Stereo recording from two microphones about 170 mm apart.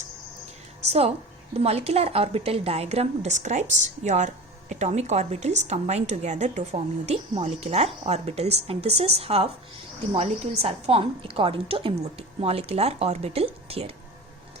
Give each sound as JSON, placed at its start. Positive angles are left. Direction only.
{"t": 0.9, "sound": "a woman's voice", "side_deg": -35}